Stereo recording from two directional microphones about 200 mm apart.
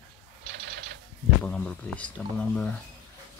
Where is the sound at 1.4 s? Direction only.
5° left (ahead or behind).